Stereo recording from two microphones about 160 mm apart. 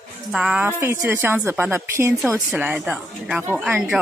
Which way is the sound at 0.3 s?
5° right (ahead or behind).